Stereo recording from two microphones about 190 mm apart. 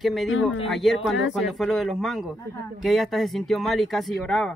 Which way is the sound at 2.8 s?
Centre (ahead or behind).